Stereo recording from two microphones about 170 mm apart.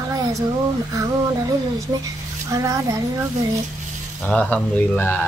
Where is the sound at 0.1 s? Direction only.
20° right (ahead or behind).